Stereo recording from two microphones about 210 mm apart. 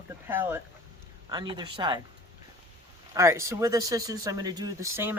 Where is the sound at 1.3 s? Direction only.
20° right (ahead or behind).